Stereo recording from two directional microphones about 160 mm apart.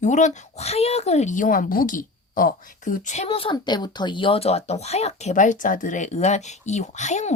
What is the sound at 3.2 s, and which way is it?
Speech, 35° left (ahead or behind).